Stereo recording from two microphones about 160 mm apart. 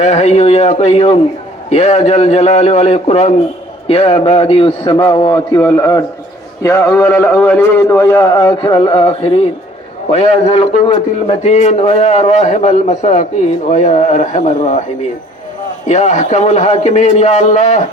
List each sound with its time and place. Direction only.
0.0 s a man's voice: 45° left (ahead or behind)
15.9 s a man's voice: 45° left (ahead or behind)